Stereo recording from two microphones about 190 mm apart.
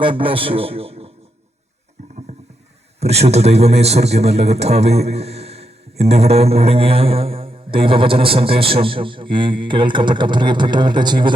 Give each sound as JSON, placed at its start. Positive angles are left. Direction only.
{"t": 0.0, "sound": "a man's voice", "side_deg": -25}
{"t": 3.0, "sound": "a man's voice", "side_deg": -35}